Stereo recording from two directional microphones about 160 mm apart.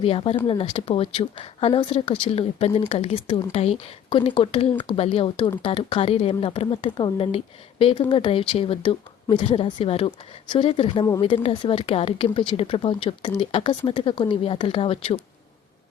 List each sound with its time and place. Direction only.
0.0 s a woman's voice: 40° left (ahead or behind)